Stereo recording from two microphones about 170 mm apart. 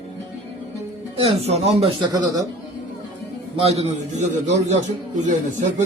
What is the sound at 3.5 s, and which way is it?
Speech, 35° right (ahead or behind).